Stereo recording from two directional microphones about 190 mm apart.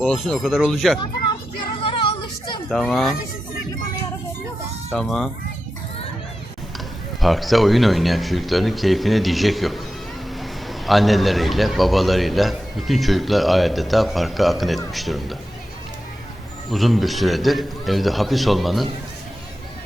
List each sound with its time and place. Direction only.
0.0 s a man's voice: centre (ahead or behind)
1.8 s a sound: 30° left (ahead or behind)
2.6 s a man's voice: centre (ahead or behind)
4.9 s a man's voice: centre (ahead or behind)
6.7 s a man's voice: centre (ahead or behind)
16.7 s a man's voice: centre (ahead or behind)